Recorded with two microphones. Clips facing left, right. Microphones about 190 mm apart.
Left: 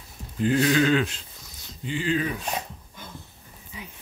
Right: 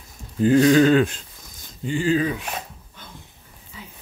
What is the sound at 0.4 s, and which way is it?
Speech, 40° right (ahead or behind).